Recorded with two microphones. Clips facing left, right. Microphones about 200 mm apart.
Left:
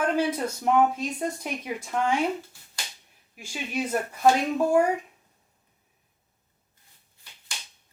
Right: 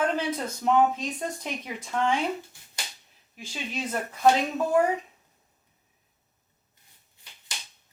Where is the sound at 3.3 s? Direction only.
10° left (ahead or behind).